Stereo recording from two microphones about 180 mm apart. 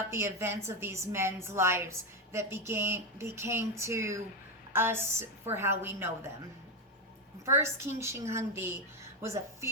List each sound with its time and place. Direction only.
0.0 s a woman's voice: 15° right (ahead or behind)
7.4 s a woman's voice: 15° right (ahead or behind)